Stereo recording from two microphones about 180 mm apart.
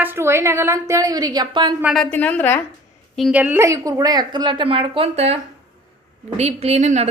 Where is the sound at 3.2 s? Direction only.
5° right (ahead or behind).